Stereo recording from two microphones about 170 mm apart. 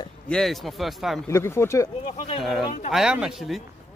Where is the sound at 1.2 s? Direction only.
15° left (ahead or behind).